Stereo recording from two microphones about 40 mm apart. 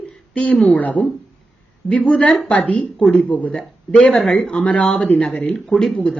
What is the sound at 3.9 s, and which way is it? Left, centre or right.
Speech, left.